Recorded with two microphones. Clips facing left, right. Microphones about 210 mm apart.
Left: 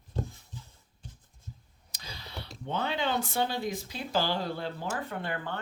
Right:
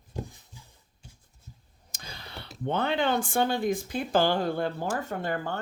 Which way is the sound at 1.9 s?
50° right (ahead or behind).